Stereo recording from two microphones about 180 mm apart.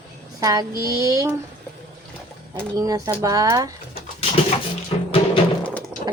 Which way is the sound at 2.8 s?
20° right (ahead or behind).